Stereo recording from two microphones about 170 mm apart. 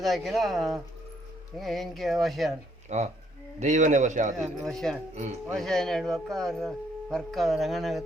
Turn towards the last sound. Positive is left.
turn(degrees=0)  # may be behind; listen again after turning